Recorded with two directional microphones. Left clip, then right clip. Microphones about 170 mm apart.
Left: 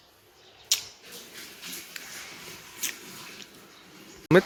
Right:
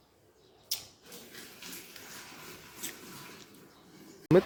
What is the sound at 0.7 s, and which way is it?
Typewriter, 15° right (ahead or behind).